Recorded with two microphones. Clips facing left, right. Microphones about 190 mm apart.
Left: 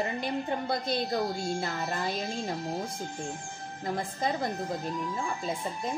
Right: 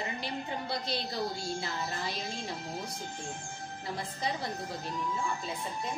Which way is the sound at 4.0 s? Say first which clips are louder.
Left 5 dB; 50° left (ahead or behind).